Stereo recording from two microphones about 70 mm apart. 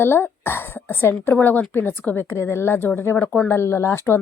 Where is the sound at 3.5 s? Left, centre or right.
Left.